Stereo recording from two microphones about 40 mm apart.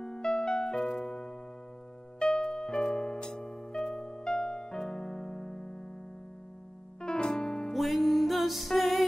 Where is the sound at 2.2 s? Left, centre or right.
Centre.